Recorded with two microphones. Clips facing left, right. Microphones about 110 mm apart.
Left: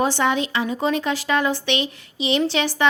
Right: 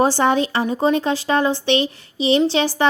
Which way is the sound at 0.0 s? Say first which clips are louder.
Right 4 dB; 35° right (ahead or behind).